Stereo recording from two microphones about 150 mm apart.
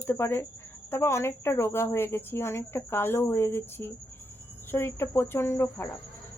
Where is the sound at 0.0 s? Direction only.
15° left (ahead or behind).